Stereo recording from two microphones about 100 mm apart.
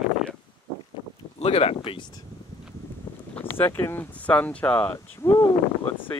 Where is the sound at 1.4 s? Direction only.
85° left.